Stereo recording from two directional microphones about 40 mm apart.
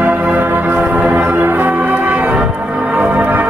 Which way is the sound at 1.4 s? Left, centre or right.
Right.